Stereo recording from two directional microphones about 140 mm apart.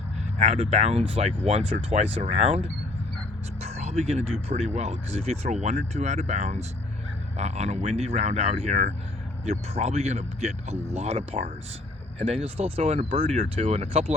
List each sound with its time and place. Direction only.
0.3 s speech: 50° right (ahead or behind)